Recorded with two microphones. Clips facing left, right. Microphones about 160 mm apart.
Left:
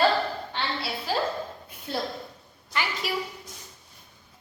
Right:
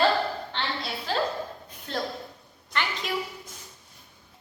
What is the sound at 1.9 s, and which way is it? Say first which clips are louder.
Speech: left 1 dB; 10° left (ahead or behind).